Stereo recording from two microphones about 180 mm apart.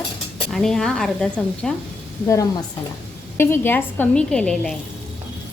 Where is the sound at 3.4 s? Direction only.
10° left (ahead or behind).